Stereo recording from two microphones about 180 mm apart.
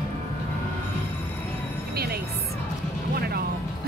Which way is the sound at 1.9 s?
60° right (ahead or behind).